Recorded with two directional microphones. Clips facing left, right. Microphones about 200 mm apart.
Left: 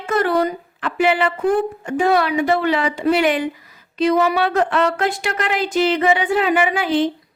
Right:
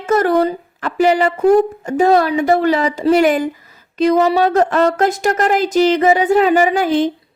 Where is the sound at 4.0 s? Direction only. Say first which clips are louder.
Right 4 dB; 40° right (ahead or behind).